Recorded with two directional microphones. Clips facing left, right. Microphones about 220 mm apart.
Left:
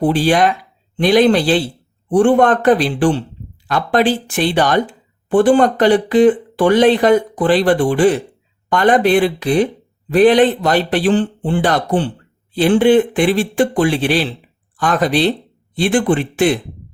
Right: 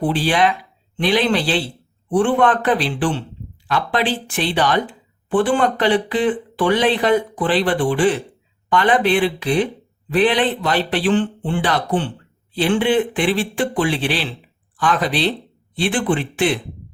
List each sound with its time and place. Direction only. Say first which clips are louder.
0.0 s speech: left 4 dB; 45° left (ahead or behind)